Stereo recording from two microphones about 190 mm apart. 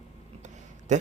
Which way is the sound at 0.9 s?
40° right (ahead or behind).